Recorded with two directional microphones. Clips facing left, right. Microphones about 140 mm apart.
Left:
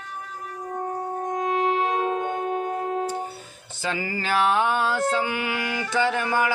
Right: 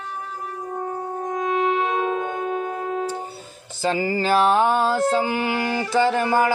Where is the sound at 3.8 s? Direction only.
35° right (ahead or behind).